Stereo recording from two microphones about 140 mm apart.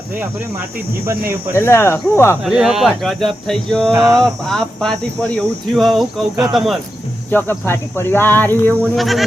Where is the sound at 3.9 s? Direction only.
20° right (ahead or behind).